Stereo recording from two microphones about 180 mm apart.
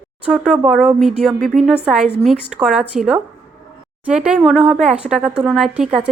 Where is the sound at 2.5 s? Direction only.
5° right (ahead or behind).